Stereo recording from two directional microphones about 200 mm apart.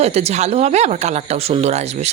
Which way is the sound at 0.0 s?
30° right (ahead or behind).